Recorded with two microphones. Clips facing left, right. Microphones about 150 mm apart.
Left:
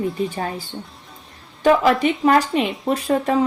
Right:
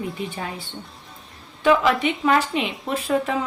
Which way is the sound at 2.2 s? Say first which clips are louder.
Left 4 dB; 40° left (ahead or behind).